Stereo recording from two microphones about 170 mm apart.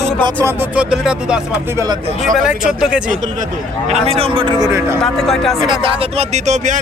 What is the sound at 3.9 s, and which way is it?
Speech, 35° right (ahead or behind).